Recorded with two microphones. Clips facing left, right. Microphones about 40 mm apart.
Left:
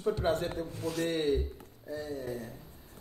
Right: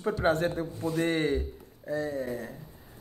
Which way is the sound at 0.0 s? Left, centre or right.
Right.